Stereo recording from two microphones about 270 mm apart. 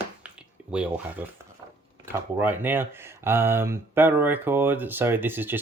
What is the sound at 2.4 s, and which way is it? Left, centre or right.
Speech, centre.